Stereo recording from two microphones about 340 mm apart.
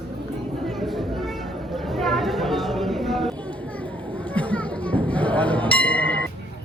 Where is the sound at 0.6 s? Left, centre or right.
Centre.